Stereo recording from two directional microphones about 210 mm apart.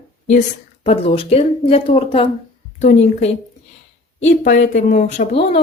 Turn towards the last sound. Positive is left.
turn(degrees=30)  # may be behind; listen again after turning